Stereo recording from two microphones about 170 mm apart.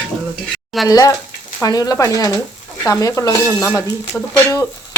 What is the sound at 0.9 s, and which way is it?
Speech, 20° left (ahead or behind).